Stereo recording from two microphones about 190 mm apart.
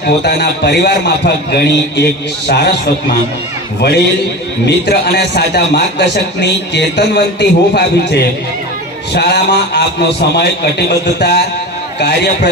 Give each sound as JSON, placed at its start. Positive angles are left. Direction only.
{"t": 0.0, "sound": "a man's voice", "side_deg": 60}